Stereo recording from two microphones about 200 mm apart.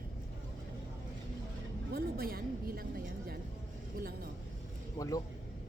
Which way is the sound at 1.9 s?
50° right (ahead or behind).